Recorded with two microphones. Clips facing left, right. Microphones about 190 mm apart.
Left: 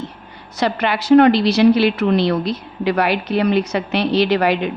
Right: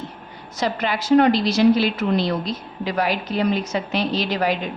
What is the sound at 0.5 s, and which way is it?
A woman's voice, 65° left (ahead or behind).